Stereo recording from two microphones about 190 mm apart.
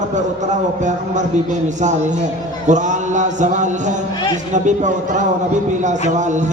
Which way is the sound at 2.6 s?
40° right (ahead or behind).